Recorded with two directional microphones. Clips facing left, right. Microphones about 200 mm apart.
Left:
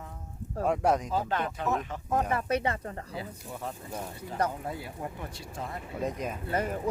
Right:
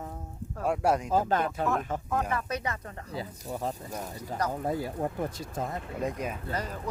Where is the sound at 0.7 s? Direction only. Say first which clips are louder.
Even; 5° right (ahead or behind).